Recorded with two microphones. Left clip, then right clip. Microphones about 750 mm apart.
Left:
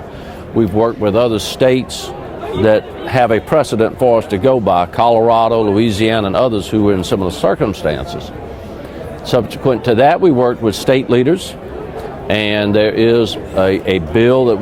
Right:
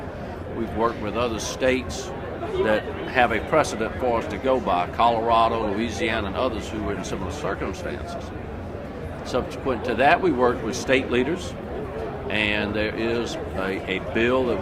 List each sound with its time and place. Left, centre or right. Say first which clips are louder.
0.8 s speech: left 10 dB; left
9.3 s speech: left 12 dB; left